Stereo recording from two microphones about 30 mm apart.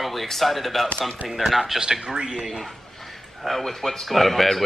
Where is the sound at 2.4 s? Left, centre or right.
Centre.